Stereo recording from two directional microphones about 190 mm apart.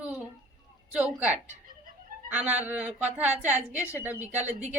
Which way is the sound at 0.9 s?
5° right (ahead or behind).